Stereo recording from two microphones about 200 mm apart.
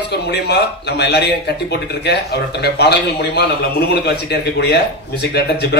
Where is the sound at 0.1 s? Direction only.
55° left (ahead or behind).